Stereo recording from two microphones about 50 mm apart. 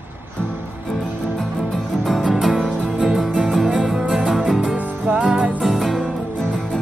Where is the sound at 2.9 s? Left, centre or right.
Right.